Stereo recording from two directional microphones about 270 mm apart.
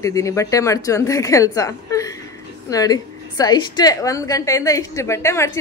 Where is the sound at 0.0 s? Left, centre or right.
Centre.